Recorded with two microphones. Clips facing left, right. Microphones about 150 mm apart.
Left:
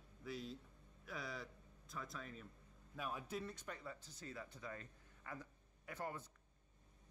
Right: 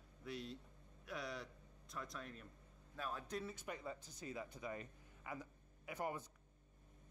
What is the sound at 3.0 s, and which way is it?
Speech, 10° left (ahead or behind).